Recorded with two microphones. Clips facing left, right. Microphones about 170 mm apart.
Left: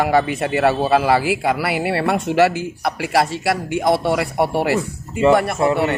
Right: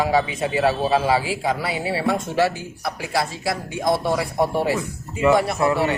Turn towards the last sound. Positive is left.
turn(degrees=25)  # may be behind; listen again after turning